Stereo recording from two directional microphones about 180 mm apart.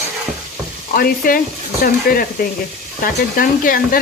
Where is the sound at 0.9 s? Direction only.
55° left (ahead or behind).